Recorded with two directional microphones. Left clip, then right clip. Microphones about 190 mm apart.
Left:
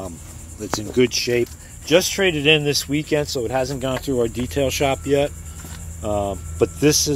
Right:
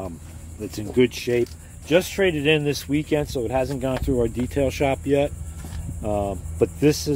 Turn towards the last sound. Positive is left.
turn(degrees=-5)  # may be behind; listen again after turning